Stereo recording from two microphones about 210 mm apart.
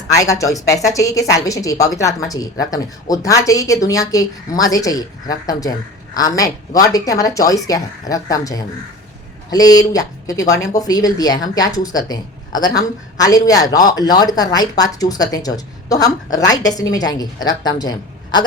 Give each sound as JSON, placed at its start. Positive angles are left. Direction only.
{"t": 0.1, "sound": "speech", "side_deg": 15}